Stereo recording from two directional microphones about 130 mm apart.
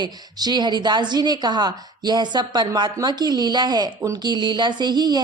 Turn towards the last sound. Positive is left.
turn(degrees=-35)  # may be behind; listen again after turning